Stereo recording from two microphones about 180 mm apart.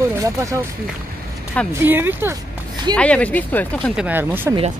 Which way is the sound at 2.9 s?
5° left (ahead or behind).